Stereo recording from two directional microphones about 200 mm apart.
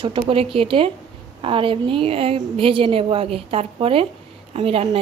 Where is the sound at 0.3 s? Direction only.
30° right (ahead or behind).